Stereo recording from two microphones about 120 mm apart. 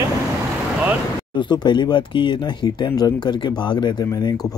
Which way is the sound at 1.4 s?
40° left (ahead or behind).